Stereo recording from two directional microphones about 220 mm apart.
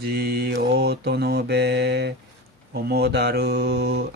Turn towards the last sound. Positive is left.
turn(degrees=-45)  # may be behind; listen again after turning